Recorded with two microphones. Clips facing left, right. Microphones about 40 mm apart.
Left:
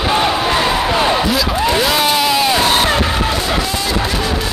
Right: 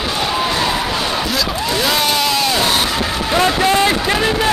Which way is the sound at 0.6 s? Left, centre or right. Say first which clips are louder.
Left 4 dB; centre.